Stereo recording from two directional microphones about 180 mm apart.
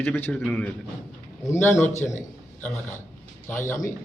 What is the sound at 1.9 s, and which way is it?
Speech, 40° left (ahead or behind).